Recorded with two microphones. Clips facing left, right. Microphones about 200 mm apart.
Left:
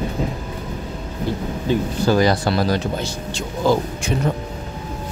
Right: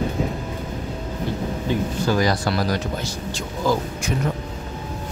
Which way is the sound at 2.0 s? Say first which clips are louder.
Left 5 dB; 30° left (ahead or behind).